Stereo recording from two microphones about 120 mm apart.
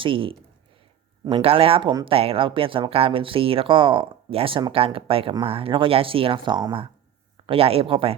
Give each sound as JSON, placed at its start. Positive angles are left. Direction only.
{"t": 0.0, "sound": "speech", "side_deg": -45}
{"t": 7.4, "sound": "speech", "side_deg": -50}